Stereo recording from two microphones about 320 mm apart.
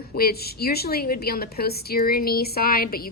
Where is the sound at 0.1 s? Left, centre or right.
Left.